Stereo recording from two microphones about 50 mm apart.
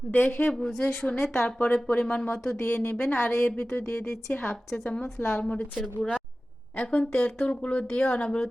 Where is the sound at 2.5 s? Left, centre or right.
Left.